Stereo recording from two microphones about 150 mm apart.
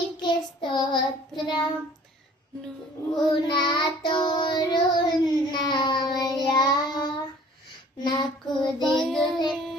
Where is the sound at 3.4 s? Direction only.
30° left (ahead or behind).